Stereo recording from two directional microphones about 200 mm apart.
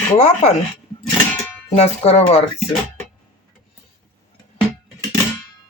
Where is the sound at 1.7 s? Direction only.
30° left (ahead or behind).